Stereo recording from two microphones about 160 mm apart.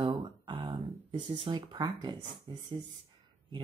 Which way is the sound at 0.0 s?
30° right (ahead or behind).